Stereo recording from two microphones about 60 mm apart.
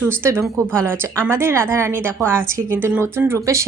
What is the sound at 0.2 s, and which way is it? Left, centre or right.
A woman's voice, right.